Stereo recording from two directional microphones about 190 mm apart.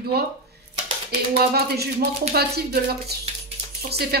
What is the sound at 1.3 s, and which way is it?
Speech, 55° right (ahead or behind).